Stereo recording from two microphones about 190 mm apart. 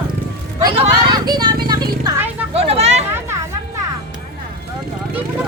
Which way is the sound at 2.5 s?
30° right (ahead or behind).